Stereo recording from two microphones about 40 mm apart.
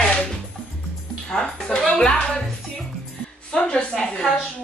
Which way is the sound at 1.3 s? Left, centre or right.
Centre.